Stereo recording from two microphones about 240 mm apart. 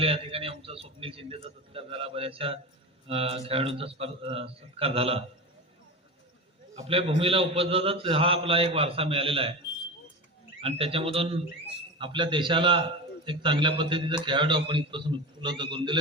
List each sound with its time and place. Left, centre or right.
0.0 s a man's voice: right
6.7 s a man's voice: right
10.6 s a man's voice: right